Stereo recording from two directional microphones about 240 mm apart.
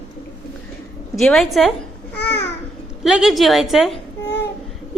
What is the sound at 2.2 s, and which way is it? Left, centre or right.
Babbling, left.